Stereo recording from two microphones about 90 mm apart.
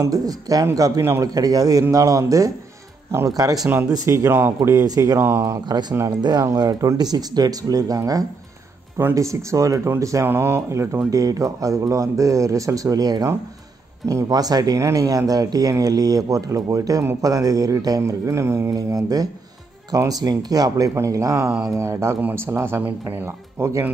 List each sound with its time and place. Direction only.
0.0 s speech: 40° right (ahead or behind); by 4.6 s 25° right (ahead or behind)
4.6 s speech: 40° right (ahead or behind)
10.2 s speech: 25° right (ahead or behind)
18.8 s speech: 40° right (ahead or behind)